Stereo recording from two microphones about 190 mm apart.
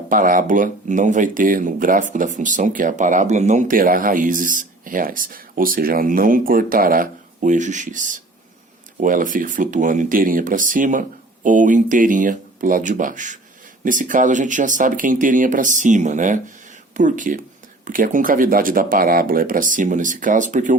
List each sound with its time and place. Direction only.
0.1 s speech: 45° right (ahead or behind)